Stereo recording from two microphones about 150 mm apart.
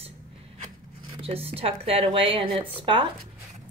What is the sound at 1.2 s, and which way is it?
Speech, 40° right (ahead or behind).